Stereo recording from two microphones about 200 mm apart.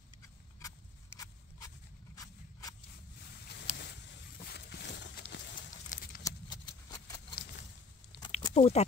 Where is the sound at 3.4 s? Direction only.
60° left (ahead or behind).